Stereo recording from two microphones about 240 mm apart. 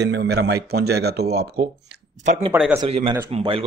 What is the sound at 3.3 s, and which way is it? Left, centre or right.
Speech, right.